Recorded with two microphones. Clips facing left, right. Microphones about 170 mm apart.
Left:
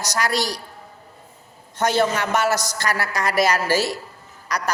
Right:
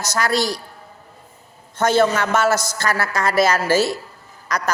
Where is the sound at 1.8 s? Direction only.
15° left (ahead or behind).